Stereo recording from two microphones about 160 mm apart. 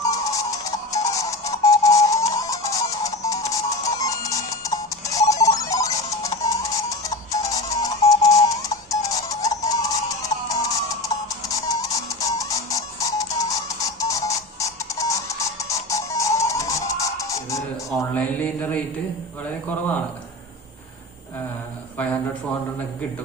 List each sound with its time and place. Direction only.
0.0 s music: 20° left (ahead or behind)